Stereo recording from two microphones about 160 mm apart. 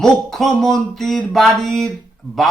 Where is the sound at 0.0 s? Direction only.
Centre (ahead or behind).